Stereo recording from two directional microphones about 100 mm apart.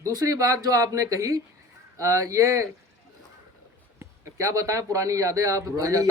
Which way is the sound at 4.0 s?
30° right (ahead or behind).